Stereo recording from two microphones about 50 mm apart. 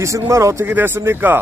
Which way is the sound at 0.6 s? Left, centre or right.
Right.